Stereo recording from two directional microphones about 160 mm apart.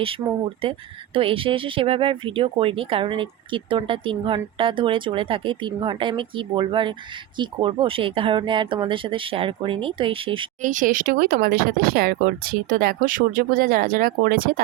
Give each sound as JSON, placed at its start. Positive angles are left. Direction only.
{"t": 0.2, "sound": "speech", "side_deg": -15}
{"t": 0.6, "sound": "speech", "side_deg": -35}
{"t": 10.6, "sound": "speech", "side_deg": -55}